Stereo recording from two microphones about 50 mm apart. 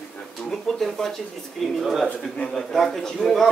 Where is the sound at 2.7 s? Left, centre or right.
Centre.